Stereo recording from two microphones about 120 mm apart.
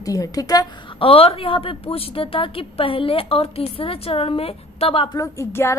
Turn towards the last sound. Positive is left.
turn(degrees=25)  # may be behind; listen again after turning